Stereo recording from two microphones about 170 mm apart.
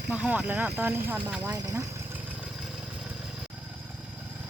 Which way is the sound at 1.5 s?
20° right (ahead or behind).